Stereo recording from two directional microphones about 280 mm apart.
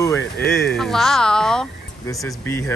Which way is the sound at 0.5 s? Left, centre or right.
Centre.